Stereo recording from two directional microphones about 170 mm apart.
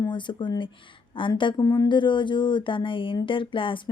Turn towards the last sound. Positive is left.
turn(degrees=30)  # may be behind; listen again after turning